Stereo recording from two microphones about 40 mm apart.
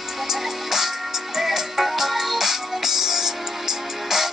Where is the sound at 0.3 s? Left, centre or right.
Centre.